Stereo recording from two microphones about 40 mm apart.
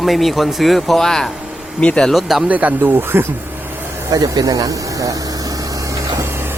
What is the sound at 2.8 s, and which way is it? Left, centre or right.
Speech, right.